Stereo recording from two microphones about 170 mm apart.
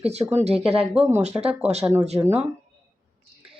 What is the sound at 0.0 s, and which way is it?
Speech, 40° right (ahead or behind).